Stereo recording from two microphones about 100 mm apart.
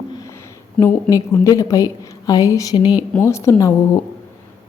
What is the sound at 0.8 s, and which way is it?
Speech, 10° left (ahead or behind).